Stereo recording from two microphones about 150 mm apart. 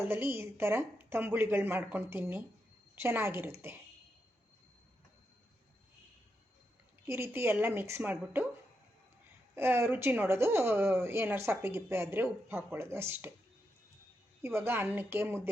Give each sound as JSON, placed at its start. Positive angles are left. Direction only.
{"t": 0.1, "sound": "speech", "side_deg": -15}
{"t": 7.0, "sound": "speech", "side_deg": -15}
{"t": 9.6, "sound": "speech", "side_deg": -15}
{"t": 14.4, "sound": "speech", "side_deg": -15}